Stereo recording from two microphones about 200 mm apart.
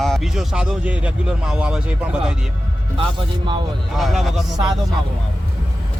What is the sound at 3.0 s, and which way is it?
Speech, 25° right (ahead or behind).